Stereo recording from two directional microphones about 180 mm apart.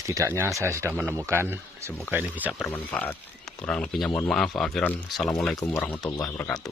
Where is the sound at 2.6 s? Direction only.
10° left (ahead or behind).